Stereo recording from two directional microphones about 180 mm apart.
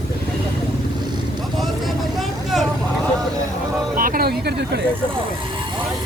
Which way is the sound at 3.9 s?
50° right (ahead or behind).